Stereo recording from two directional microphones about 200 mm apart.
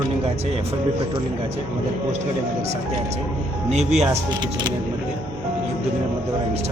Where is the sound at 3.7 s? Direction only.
35° right (ahead or behind).